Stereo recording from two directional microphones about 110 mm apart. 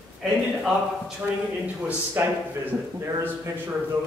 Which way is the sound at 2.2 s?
20° right (ahead or behind).